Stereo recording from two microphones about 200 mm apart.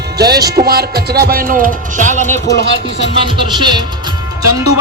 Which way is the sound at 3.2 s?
25° right (ahead or behind).